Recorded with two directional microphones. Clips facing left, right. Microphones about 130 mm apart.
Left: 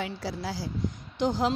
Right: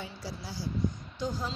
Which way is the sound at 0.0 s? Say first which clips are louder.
Left 8 dB; 90° left.